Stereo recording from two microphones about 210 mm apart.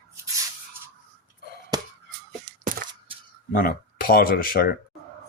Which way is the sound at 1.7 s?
20° right (ahead or behind).